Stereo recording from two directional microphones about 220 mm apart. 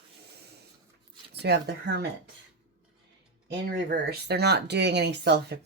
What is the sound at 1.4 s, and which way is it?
Speech, 50° right (ahead or behind).